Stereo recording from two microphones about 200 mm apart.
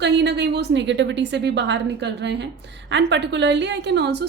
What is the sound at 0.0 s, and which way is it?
Speech, 60° right (ahead or behind).